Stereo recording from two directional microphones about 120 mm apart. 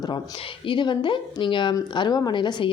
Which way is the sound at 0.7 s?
45° left (ahead or behind).